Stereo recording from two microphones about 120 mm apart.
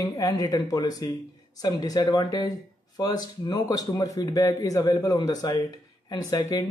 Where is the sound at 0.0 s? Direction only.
30° left (ahead or behind).